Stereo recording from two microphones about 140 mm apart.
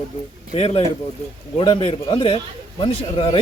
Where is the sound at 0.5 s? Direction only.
45° left (ahead or behind).